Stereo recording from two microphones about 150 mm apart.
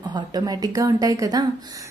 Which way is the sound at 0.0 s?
30° right (ahead or behind).